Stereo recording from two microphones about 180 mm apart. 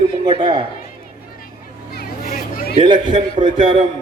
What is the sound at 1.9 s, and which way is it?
Hubbub, 55° left (ahead or behind).